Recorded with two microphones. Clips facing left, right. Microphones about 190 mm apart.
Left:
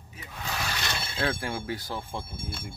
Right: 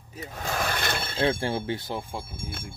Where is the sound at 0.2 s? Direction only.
45° right (ahead or behind).